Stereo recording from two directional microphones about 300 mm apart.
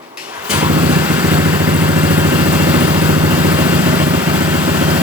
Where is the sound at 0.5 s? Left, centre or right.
Centre.